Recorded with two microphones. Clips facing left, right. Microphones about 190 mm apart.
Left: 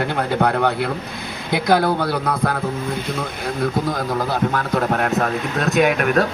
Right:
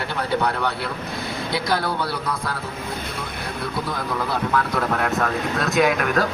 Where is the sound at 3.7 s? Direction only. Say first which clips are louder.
Left 5 dB; 40° left (ahead or behind).